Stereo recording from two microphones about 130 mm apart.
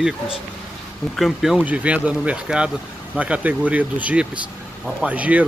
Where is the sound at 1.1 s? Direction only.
Centre (ahead or behind).